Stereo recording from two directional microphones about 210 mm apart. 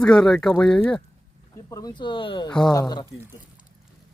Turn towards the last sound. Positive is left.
turn(degrees=20)  # may be behind; listen again after turning